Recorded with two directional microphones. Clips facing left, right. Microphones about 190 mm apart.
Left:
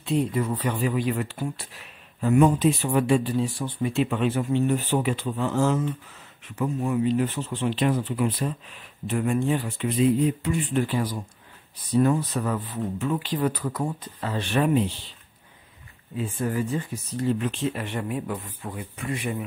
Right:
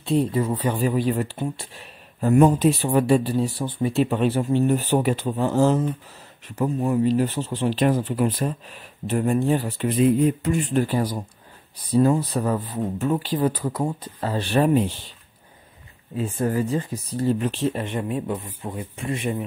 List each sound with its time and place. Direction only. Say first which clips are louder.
0.0 s speech: right 3 dB; 30° right (ahead or behind)
2.1 s speech: right 3 dB; 40° right (ahead or behind)
16.2 s speech: right 4 dB; 40° right (ahead or behind)
17.7 s speech: right 3 dB; 25° right (ahead or behind)